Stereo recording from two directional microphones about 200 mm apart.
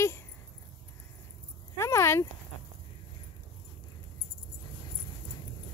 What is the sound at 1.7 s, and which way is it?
Speech, 15° left (ahead or behind).